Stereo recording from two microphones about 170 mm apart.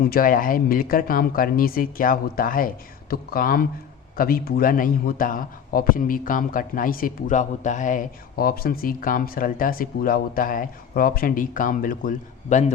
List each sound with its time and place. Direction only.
0.0 s a man's voice: 60° left (ahead or behind)